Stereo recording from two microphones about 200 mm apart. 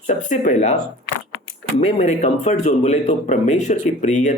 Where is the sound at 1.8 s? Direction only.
35° left (ahead or behind).